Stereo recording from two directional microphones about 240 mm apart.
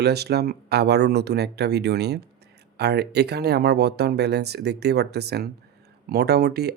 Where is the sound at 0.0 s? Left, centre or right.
Right.